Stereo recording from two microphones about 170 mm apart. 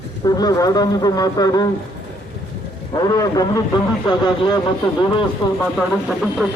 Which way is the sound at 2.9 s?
20° left (ahead or behind).